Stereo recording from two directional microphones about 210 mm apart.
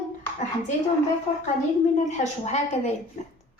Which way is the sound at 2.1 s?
35° left (ahead or behind).